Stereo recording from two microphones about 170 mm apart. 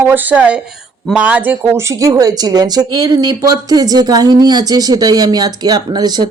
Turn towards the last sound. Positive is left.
turn(degrees=-25)  # may be behind; listen again after turning